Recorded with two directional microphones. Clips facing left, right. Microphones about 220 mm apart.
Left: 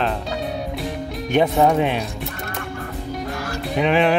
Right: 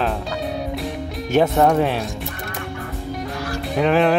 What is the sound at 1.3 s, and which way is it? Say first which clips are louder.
Speech: right 1 dB; centre (ahead or behind).